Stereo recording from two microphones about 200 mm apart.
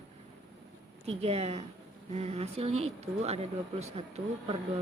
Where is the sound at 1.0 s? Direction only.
30° right (ahead or behind).